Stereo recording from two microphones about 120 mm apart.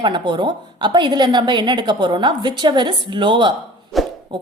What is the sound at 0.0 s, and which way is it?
A woman's voice, 40° right (ahead or behind).